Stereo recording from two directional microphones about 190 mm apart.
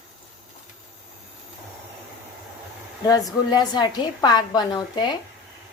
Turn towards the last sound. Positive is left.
turn(degrees=25)  # may be behind; listen again after turning